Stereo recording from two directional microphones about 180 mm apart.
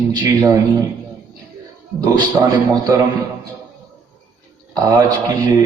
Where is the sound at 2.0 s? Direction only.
20° right (ahead or behind).